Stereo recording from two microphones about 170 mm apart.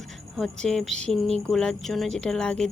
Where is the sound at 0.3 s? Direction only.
5° left (ahead or behind).